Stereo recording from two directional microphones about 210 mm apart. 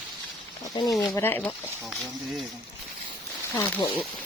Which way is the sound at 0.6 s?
20° left (ahead or behind).